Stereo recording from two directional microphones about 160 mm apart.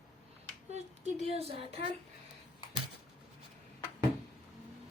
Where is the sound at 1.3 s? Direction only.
40° right (ahead or behind).